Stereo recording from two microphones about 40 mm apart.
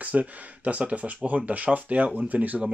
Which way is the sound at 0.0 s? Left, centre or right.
Right.